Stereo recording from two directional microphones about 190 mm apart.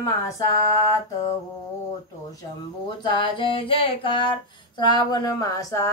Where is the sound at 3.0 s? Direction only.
25° left (ahead or behind).